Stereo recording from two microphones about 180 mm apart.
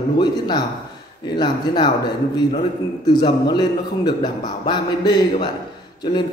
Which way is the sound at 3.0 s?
25° left (ahead or behind).